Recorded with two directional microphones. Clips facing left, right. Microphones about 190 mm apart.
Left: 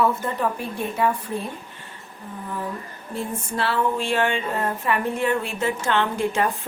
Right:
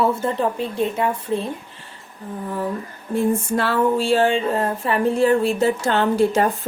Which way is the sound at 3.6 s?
40° right (ahead or behind).